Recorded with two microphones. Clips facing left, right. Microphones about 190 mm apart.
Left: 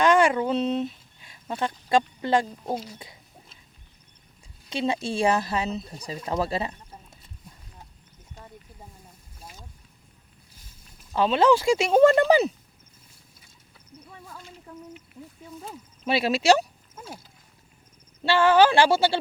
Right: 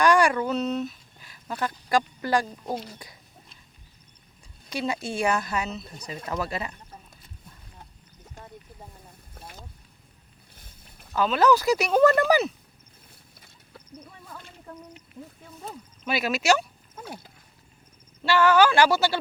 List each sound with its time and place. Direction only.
0.0 s speech: 25° left (ahead or behind)
2.6 s speech: centre (ahead or behind)
4.7 s speech: 25° left (ahead or behind)
11.1 s speech: 30° left (ahead or behind)
16.0 s speech: 30° left (ahead or behind)
17.0 s wild animals: 60° right (ahead or behind)
18.2 s speech: 30° left (ahead or behind)